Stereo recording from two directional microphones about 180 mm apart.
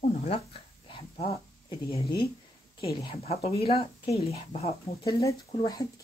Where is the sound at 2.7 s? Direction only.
25° left (ahead or behind).